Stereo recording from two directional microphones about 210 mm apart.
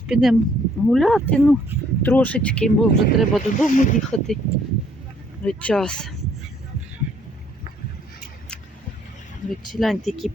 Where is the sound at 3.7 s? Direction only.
35° left (ahead or behind).